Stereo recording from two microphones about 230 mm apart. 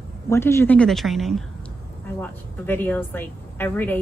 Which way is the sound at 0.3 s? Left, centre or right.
Centre.